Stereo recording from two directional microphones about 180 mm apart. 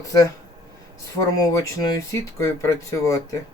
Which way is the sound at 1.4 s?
20° left (ahead or behind).